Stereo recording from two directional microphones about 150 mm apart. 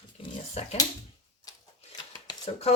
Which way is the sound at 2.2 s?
40° left (ahead or behind).